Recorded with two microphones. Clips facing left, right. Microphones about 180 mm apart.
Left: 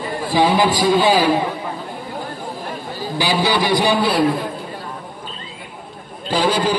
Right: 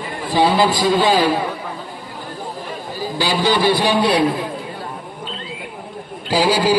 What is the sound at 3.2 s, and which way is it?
Speech, 15° left (ahead or behind).